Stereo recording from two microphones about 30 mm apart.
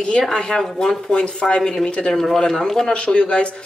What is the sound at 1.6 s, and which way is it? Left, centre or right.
Speech, centre.